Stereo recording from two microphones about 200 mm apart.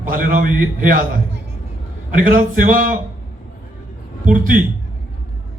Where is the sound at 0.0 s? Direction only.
45° right (ahead or behind).